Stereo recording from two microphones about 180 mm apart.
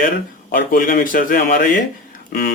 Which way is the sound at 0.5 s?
50° left (ahead or behind).